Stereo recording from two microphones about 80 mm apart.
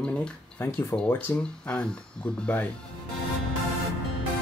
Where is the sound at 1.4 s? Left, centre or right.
Centre.